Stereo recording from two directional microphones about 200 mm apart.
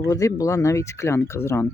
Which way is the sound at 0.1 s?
15° left (ahead or behind).